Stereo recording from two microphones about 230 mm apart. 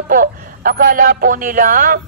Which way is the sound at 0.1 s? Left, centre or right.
Right.